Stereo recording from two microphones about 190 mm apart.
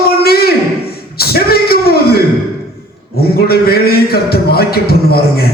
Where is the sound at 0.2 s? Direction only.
55° left (ahead or behind).